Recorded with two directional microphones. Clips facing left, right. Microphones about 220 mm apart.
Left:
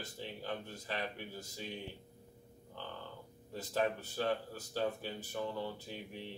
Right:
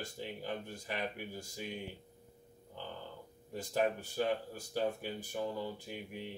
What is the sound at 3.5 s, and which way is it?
Speech, 15° right (ahead or behind).